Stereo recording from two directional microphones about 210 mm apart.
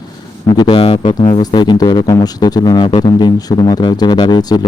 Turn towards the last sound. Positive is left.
turn(degrees=20)  # may be behind; listen again after turning